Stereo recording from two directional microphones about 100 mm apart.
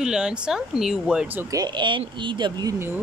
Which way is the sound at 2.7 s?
25° right (ahead or behind).